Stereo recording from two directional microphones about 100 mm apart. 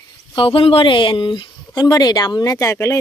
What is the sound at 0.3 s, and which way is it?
Speech, 60° left (ahead or behind).